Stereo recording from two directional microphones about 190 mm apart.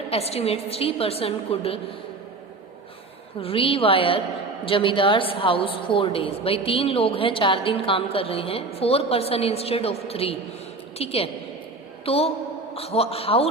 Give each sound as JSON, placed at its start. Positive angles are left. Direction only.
{"t": 0.1, "sound": "a woman's voice", "side_deg": 30}
{"t": 3.4, "sound": "a woman's voice", "side_deg": 30}